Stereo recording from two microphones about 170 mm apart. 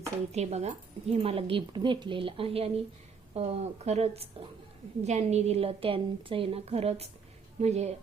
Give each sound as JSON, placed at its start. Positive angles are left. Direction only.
{"t": 0.3, "sound": "a woman's voice", "side_deg": -40}